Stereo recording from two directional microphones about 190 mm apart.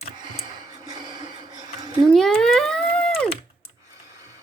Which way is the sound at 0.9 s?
25° right (ahead or behind).